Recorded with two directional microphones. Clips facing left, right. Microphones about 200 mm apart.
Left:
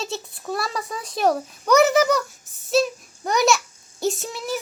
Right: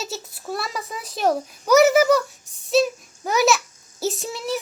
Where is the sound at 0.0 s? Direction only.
5° right (ahead or behind).